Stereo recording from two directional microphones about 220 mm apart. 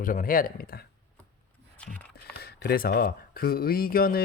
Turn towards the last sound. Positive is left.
turn(degrees=40)  # may be behind; listen again after turning